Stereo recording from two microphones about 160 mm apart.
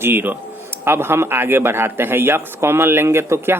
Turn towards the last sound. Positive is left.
turn(degrees=-15)  # may be behind; listen again after turning